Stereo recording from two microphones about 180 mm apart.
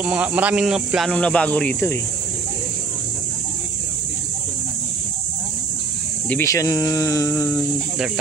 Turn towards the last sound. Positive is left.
turn(degrees=15)  # may be behind; listen again after turning